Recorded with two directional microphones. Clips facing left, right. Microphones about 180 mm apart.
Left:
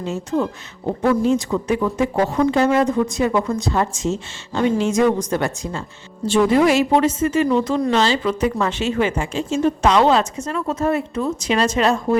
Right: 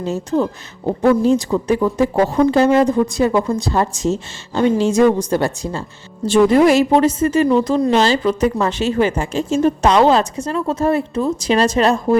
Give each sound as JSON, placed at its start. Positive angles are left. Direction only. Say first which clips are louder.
{"t": 0.0, "sound": "speech", "louder": "right 3 dB", "side_deg": -35}